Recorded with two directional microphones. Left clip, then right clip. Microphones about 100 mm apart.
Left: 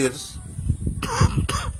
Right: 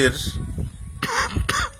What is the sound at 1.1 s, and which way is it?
Cough, 25° left (ahead or behind).